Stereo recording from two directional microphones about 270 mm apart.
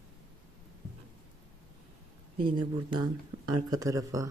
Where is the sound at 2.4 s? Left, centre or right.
Centre.